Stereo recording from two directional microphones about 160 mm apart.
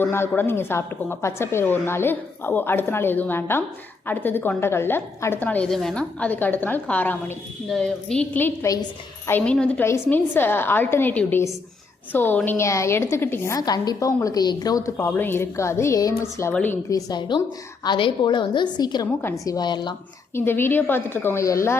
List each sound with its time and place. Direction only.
0.0 s a woman's voice: 15° left (ahead or behind)
9.4 s a woman's voice: 5° left (ahead or behind); by 20.0 s 30° left (ahead or behind)
20.3 s a woman's voice: 15° left (ahead or behind)